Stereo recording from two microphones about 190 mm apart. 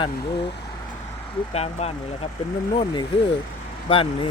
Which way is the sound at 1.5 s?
35° left (ahead or behind).